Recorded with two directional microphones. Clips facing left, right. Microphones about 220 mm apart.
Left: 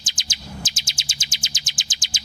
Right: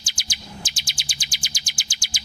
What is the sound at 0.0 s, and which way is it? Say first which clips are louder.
Chirp: left 2 dB; 20° left (ahead or behind).